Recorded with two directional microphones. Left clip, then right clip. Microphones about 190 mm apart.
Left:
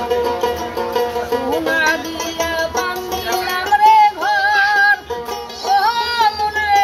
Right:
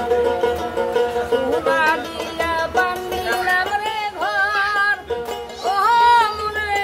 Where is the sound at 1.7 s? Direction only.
15° right (ahead or behind).